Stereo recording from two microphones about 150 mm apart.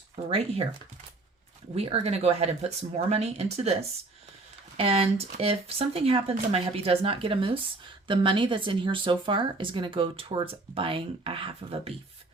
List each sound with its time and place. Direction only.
0.3 s speech: 40° right (ahead or behind)
1.7 s speech: 40° right (ahead or behind)